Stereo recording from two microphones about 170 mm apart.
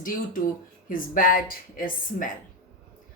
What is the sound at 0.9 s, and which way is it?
A woman's voice, 55° left (ahead or behind).